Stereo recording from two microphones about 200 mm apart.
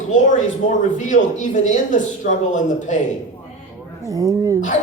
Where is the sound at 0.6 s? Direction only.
40° left (ahead or behind).